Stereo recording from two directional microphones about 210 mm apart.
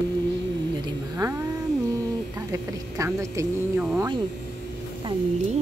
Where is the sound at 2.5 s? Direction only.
15° right (ahead or behind).